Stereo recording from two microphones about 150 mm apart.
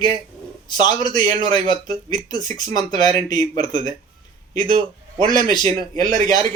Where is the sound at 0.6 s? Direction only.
30° left (ahead or behind).